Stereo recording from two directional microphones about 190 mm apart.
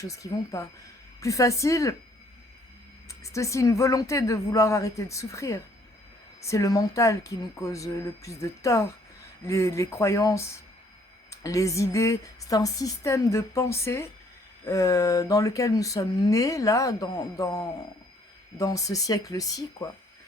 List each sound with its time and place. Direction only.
0.0 s speech: 15° left (ahead or behind)
3.1 s speech: 15° left (ahead or behind)